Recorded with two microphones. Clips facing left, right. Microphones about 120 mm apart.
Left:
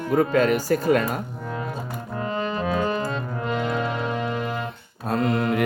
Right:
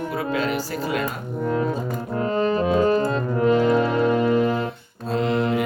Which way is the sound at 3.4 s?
Centre (ahead or behind).